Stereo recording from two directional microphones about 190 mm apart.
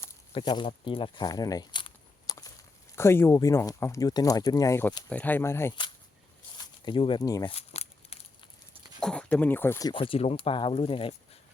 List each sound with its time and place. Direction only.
0.3 s speech: 25° left (ahead or behind)
6.6 s speech: 25° left (ahead or behind)
7.5 s crumpling: 35° left (ahead or behind)
9.0 s speech: 5° left (ahead or behind); by 11.1 s 30° left (ahead or behind)